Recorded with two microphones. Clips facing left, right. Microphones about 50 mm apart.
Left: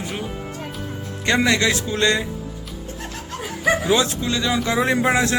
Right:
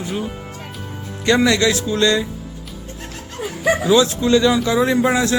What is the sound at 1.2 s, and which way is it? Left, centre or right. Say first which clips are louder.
Speech: right 3 dB; left.